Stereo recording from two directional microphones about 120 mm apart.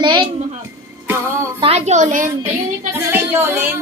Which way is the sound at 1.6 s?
65° right (ahead or behind).